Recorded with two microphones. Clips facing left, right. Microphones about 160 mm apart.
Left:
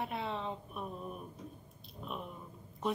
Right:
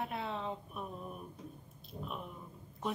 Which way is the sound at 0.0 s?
Centre (ahead or behind).